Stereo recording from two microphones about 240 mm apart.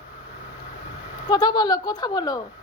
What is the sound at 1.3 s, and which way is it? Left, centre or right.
Speech, centre.